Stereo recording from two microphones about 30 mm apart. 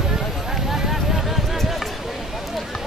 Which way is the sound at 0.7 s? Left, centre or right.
Centre.